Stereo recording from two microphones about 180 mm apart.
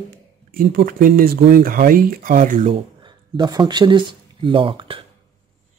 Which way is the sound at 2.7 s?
25° right (ahead or behind).